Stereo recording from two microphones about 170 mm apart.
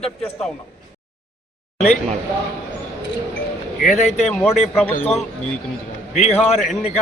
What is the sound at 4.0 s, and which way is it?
Speech, 40° left (ahead or behind).